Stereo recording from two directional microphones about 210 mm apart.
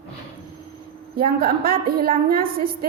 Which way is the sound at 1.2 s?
45° right (ahead or behind).